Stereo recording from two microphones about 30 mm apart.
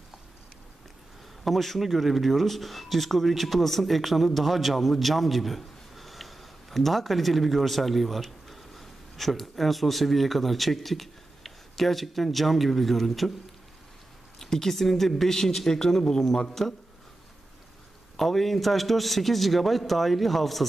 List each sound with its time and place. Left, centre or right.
1.4 s a man's voice: centre
14.4 s a man's voice: centre
18.1 s a man's voice: centre